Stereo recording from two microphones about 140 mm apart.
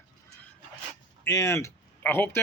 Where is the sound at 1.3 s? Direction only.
20° left (ahead or behind).